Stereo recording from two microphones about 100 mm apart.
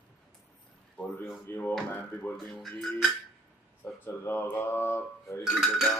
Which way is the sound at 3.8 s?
20° left (ahead or behind).